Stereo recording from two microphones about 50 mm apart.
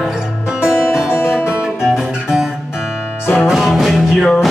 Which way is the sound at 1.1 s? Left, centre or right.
Left.